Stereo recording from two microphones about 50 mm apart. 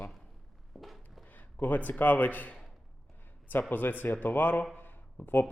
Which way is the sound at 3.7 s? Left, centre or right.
Left.